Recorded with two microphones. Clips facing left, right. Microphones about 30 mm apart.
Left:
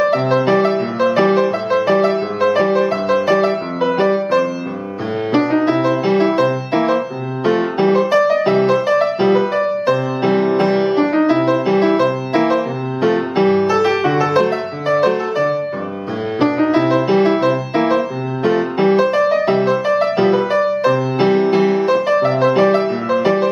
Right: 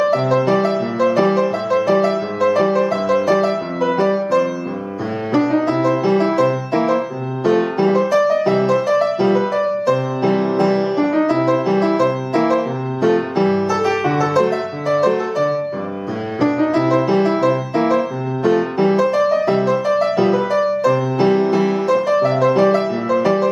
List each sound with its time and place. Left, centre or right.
0.0 s music: left
22.8 s music: centre